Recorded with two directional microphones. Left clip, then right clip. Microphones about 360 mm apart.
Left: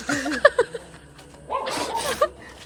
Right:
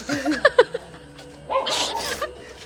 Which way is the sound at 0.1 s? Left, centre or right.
Centre.